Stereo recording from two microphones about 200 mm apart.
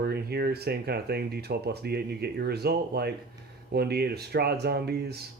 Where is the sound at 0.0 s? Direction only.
55° right (ahead or behind).